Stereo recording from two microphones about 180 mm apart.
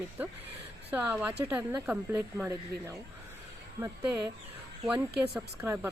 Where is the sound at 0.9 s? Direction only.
10° right (ahead or behind).